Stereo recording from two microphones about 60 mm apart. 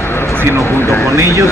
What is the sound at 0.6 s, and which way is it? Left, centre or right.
Speech, left.